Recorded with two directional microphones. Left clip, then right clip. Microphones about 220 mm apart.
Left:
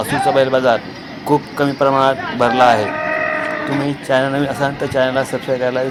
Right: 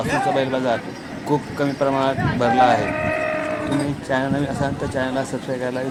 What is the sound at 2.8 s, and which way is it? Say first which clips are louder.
Livestock: left 4 dB; 25° left (ahead or behind).